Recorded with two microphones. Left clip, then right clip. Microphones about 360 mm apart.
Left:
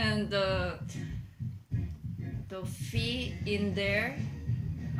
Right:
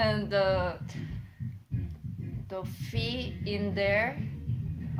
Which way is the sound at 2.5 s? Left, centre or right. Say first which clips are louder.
Right 2 dB; centre.